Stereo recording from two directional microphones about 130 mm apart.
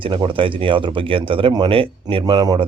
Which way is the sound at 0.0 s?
40° right (ahead or behind).